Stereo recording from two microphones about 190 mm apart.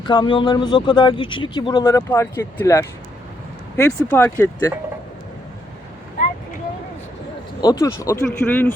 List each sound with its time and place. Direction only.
0.0 s speech: 25° left (ahead or behind)
7.6 s speech: 20° left (ahead or behind)